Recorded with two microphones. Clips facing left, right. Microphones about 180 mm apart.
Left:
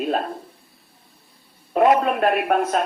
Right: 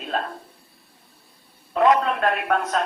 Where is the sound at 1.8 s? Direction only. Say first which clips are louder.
Left 2 dB; 20° left (ahead or behind).